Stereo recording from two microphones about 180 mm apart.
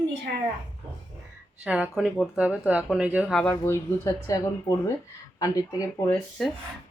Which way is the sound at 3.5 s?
15° left (ahead or behind).